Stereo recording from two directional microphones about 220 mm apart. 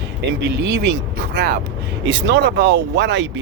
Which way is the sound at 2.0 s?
55° right (ahead or behind).